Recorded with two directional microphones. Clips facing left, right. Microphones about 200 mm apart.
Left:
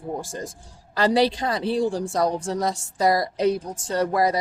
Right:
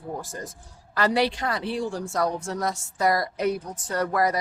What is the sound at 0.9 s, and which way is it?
Speech, 35° left (ahead or behind).